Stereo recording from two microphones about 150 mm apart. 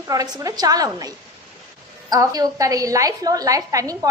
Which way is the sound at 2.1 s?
25° right (ahead or behind).